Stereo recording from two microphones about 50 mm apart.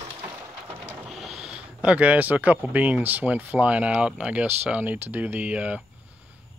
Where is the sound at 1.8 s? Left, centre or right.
Right.